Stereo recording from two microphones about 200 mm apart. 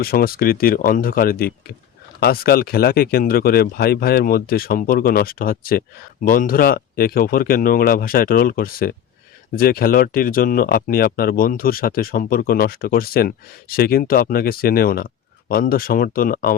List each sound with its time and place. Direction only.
0.0 s speech: 50° left (ahead or behind)